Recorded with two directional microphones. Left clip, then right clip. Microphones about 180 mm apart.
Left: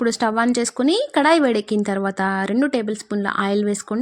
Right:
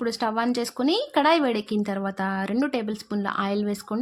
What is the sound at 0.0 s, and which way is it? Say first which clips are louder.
A woman's voice: left 6 dB; 25° left (ahead or behind).